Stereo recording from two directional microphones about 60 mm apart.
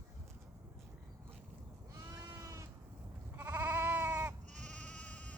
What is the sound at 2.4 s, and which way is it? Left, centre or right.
Sheep, right.